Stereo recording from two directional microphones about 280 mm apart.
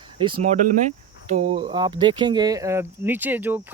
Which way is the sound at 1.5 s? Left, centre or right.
Centre.